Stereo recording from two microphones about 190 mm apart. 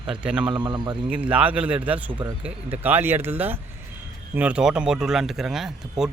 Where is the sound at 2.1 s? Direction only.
25° right (ahead or behind).